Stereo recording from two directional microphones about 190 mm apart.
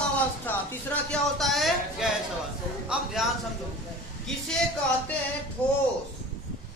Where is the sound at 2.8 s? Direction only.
Centre (ahead or behind).